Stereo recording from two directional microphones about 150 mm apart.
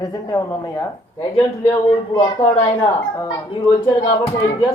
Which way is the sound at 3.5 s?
30° left (ahead or behind).